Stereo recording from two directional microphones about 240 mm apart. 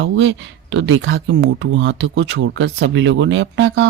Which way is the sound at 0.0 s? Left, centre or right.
Right.